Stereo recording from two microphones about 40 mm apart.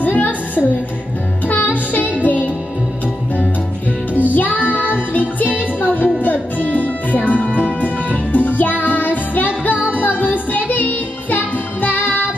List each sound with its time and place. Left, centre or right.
0.0 s music: left
4.1 s music: left